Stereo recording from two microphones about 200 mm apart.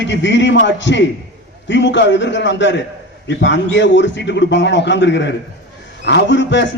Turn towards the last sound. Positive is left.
turn(degrees=65)  # may be behind; listen again after turning